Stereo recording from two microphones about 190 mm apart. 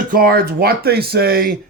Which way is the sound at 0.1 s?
50° right (ahead or behind).